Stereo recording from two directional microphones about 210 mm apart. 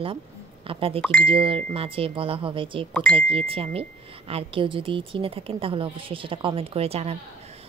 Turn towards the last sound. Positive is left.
turn(degrees=-30)  # may be behind; listen again after turning